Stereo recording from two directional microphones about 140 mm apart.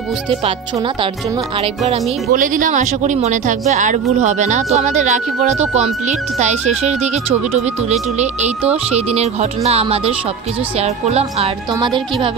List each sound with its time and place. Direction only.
2.3 s speech: 70° right (ahead or behind); by 11.5 s 50° right (ahead or behind)
11.8 s speech: 35° right (ahead or behind)